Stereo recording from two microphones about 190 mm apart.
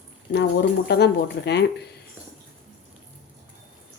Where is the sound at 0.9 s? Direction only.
65° left (ahead or behind).